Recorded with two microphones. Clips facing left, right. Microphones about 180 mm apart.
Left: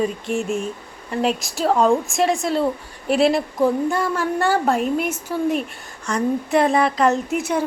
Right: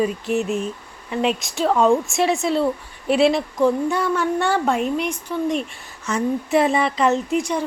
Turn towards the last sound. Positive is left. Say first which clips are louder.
# even
turn(degrees=5)  # may be behind; listen again after turning